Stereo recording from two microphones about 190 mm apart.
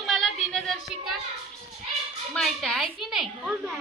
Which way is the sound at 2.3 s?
Centre (ahead or behind).